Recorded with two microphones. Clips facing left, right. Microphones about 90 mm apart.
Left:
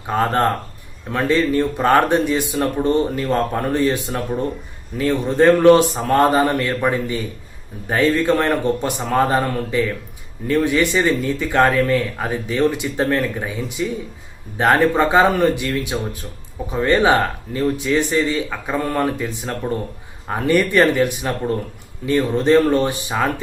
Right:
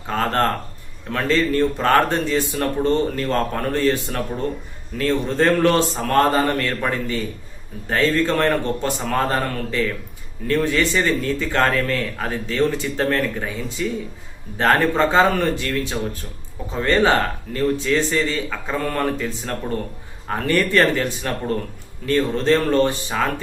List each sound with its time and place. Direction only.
0.1 s speech: 15° left (ahead or behind)